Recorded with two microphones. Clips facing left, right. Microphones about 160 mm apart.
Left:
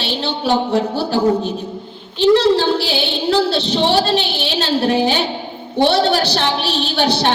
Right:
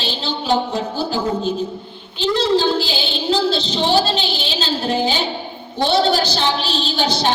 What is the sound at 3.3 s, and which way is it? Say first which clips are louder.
Speech: left 2 dB; 65° left (ahead or behind).